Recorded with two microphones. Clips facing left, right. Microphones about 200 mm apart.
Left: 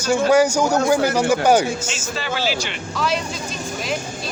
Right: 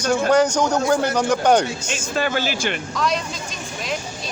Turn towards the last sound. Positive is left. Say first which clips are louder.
# even
turn(degrees=5)  # may be behind; listen again after turning